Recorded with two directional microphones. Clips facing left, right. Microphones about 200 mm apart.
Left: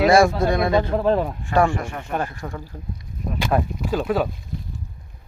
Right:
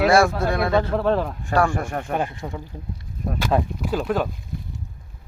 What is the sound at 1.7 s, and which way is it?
Speech, 45° right (ahead or behind).